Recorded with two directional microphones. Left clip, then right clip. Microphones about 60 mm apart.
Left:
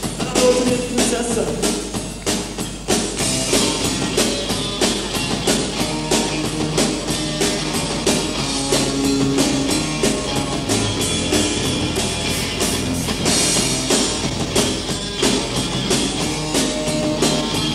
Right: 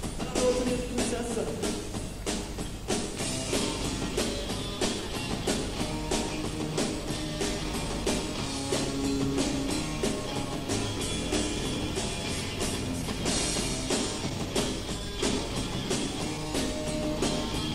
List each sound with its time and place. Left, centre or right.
0.4 s music: left
8.6 s music: left
13.2 s music: left